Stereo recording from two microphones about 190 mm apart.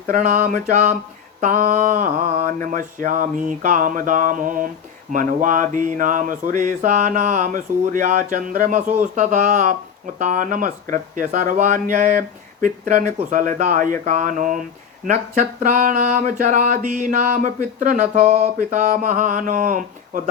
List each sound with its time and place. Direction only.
0.1 s mantra: 45° right (ahead or behind)